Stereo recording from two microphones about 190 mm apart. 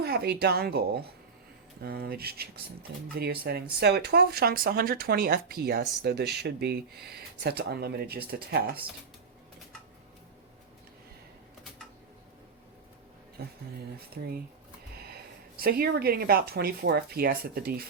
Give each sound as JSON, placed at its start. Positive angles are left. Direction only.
{"t": 0.0, "sound": "speech", "side_deg": -55}
{"t": 13.4, "sound": "speech", "side_deg": -55}
{"t": 15.5, "sound": "speech", "side_deg": -50}